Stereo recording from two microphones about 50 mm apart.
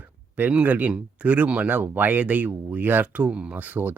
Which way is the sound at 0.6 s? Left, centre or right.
Right.